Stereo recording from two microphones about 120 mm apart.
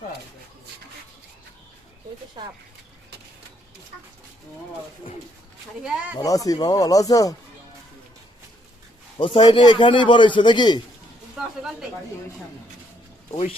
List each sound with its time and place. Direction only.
2.4 s speech: 35° right (ahead or behind)
5.8 s speech: 10° right (ahead or behind)
6.1 s speech: 30° left (ahead or behind)
9.1 s a man's voice: 40° left (ahead or behind)
11.4 s snake: 5° right (ahead or behind)